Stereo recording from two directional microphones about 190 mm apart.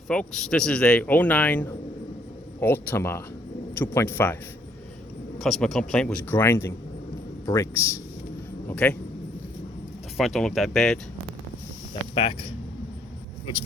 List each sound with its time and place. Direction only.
0.1 s speech: 5° left (ahead or behind)
5.4 s a man's voice: centre (ahead or behind)
10.2 s a man's voice: centre (ahead or behind)